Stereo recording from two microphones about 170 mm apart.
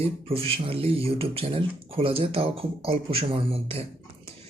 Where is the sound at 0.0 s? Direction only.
35° right (ahead or behind).